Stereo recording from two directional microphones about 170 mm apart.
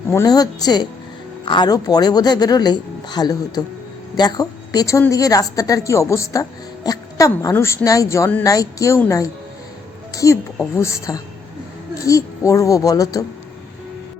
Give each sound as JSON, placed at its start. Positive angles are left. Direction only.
{"t": 0.1, "sound": "a woman's voice", "side_deg": 20}